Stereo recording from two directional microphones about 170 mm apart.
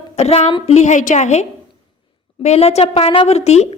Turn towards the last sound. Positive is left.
turn(degrees=40)  # may be behind; listen again after turning